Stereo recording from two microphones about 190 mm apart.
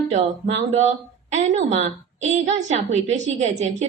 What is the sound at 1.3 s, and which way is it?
A woman's voice, 35° right (ahead or behind).